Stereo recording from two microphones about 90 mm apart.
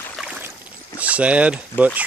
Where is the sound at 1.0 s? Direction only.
15° right (ahead or behind).